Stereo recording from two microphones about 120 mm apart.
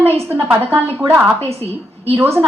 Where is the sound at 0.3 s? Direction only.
15° right (ahead or behind).